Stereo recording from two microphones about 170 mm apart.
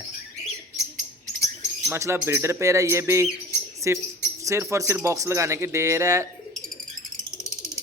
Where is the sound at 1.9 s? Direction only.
15° right (ahead or behind).